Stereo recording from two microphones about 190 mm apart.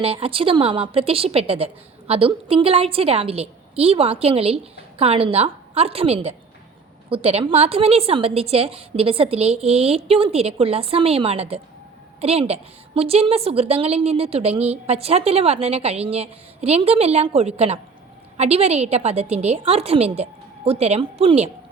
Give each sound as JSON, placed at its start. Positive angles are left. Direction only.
{"t": 0.0, "sound": "a woman's voice", "side_deg": -30}